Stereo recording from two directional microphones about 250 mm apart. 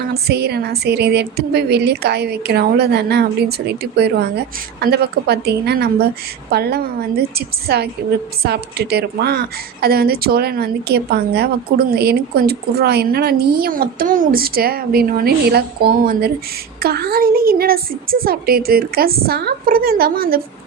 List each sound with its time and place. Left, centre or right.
0.1 s a woman's voice: right